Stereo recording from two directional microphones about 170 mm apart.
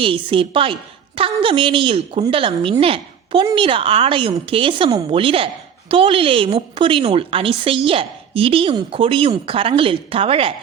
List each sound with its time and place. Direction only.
0.0 s a woman's voice: 30° right (ahead or behind)